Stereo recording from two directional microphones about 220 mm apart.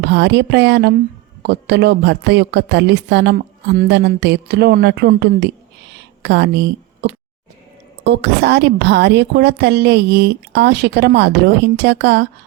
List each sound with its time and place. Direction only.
0.1 s a woman's voice: 50° right (ahead or behind)
5.9 s a sound: 50° right (ahead or behind)
8.0 s a woman's voice: 50° right (ahead or behind)